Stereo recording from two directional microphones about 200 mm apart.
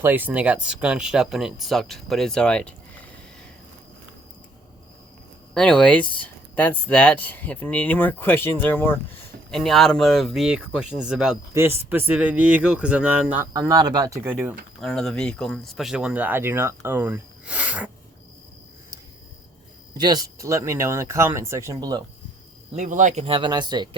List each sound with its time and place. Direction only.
0.0 s speech: 10° right (ahead or behind)
5.5 s speech: 5° left (ahead or behind)
14.8 s speech: centre (ahead or behind)
19.9 s speech: 20° right (ahead or behind)
22.7 s speech: 40° right (ahead or behind); by 23.9 s 20° right (ahead or behind)